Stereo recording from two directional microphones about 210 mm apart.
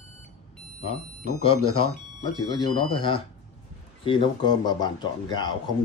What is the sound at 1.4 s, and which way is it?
A man's voice, 25° left (ahead or behind).